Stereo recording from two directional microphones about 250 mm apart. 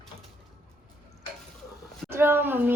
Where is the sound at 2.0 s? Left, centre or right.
Centre.